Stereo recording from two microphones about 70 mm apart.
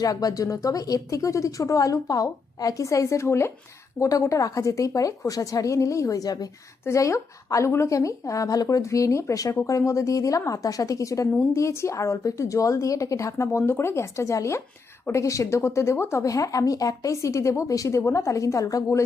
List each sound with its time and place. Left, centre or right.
0.0 s a woman's voice: left
6.8 s a woman's voice: left
16.2 s a woman's voice: left